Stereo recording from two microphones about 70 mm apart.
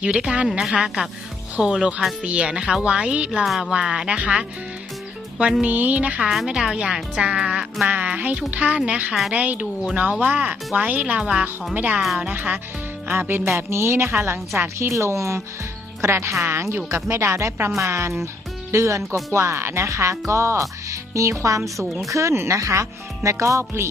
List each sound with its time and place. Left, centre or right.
0.0 s speech: centre
3.4 s speech: centre
5.6 s speech: right
7.9 s speech: centre
11.2 s speech: centre
11.7 s speech: right
11.9 s speech: centre
12.3 s speech: right